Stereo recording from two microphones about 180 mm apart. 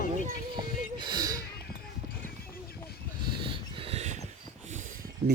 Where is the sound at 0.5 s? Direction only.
25° right (ahead or behind).